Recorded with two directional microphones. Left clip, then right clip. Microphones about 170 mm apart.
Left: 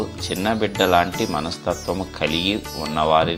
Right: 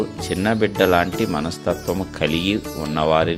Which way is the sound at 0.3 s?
50° right (ahead or behind).